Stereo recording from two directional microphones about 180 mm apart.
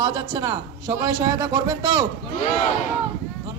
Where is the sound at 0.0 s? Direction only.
20° right (ahead or behind).